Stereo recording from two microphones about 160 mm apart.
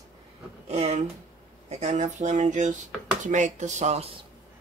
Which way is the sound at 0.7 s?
40° right (ahead or behind).